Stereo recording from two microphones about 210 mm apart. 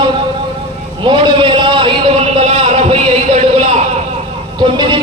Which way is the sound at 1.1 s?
25° right (ahead or behind).